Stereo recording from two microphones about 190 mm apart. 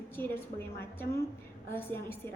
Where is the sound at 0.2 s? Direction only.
10° left (ahead or behind).